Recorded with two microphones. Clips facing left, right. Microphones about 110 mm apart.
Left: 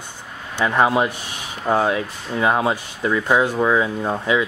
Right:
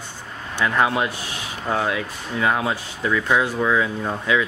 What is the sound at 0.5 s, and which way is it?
Speech, 25° left (ahead or behind).